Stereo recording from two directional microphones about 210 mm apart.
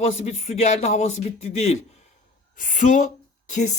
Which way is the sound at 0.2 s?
30° left (ahead or behind).